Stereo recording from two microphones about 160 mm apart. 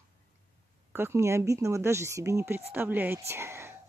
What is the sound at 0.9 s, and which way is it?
Speech, 15° right (ahead or behind).